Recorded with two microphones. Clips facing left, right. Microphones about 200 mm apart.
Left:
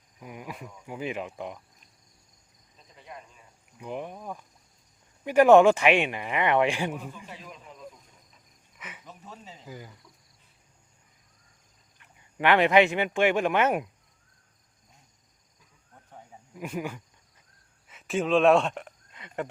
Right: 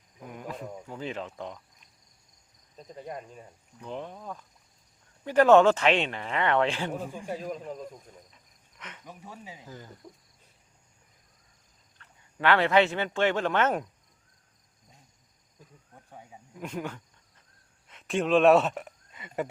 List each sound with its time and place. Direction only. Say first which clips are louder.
0.3 s cricket: right 1 dB; 10° left (ahead or behind)
0.9 s speech: left 5 dB; 10° left (ahead or behind)
2.7 s speech: right 8 dB; 45° right (ahead or behind)
3.8 s speech: left 2 dB; 15° left (ahead or behind)
7.2 s speech: right 10 dB; 45° right (ahead or behind)
8.8 s cricket: left 1 dB; 5° left (ahead or behind)
9.0 s speech: right 3 dB; 10° right (ahead or behind)
9.6 s speech: left 7 dB; 10° left (ahead or behind)
11.9 s speech: left 3 dB; 15° left (ahead or behind)
16.0 s snake: even; 10° right (ahead or behind)
16.6 s wild animals: left 2 dB; 10° left (ahead or behind)
17.8 s speech: even; 5° left (ahead or behind)